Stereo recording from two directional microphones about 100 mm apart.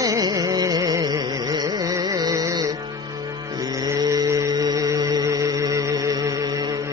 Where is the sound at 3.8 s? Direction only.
35° right (ahead or behind).